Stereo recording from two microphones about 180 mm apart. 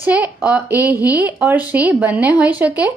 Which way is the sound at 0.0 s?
10° right (ahead or behind).